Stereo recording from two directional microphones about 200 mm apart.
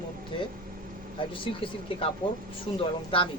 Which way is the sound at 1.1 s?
25° left (ahead or behind).